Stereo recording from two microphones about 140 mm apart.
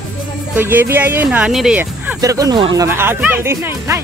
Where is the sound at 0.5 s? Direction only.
15° right (ahead or behind).